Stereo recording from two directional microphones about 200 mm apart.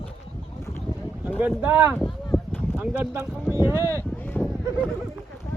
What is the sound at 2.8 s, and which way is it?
Speech, 5° right (ahead or behind).